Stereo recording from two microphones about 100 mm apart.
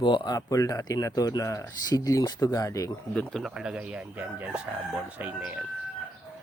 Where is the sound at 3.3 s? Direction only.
Centre (ahead or behind); by 5.6 s 15° right (ahead or behind).